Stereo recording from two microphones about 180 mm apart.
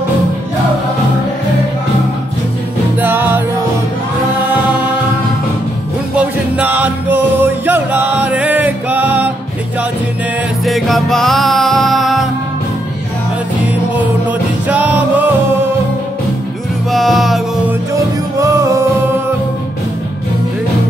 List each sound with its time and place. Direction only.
3.0 s music: 10° right (ahead or behind)
6.1 s music: 10° right (ahead or behind)
10.6 s music: centre (ahead or behind)
14.7 s music: 10° right (ahead or behind)
16.9 s music: centre (ahead or behind)
18.4 s music: 15° right (ahead or behind)